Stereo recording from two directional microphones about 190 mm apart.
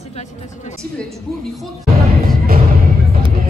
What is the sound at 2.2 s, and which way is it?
Music, 50° right (ahead or behind).